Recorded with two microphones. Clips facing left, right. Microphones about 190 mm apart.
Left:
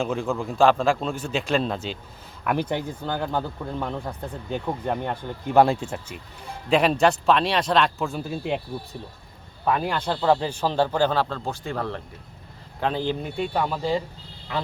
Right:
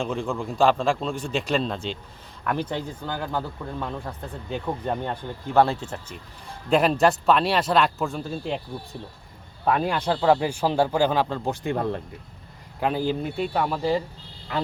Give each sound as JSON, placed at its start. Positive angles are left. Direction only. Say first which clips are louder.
{"t": 0.0, "sound": "a man's voice", "louder": "left 2 dB", "side_deg": 5}
{"t": 9.7, "sound": "speech", "louder": "right 2 dB", "side_deg": 0}
{"t": 10.1, "sound": "speech", "louder": "right 1 dB", "side_deg": -10}